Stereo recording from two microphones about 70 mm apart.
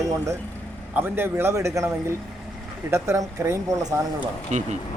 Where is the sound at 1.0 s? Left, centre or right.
Right.